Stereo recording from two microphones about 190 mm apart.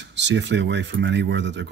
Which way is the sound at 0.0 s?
70° right (ahead or behind).